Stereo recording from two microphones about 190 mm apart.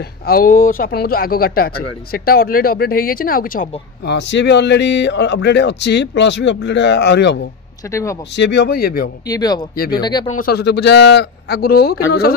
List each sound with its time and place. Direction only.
0.3 s speech: 50° left (ahead or behind); by 7.3 s 65° left (ahead or behind)
7.9 s speech: 15° left (ahead or behind)
8.4 s speech: 65° left (ahead or behind)
9.3 s speech: 20° left (ahead or behind)
10.3 s speech: 55° left (ahead or behind)